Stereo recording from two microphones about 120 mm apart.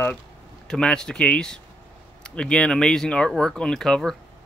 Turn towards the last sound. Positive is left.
turn(degrees=5)  # may be behind; listen again after turning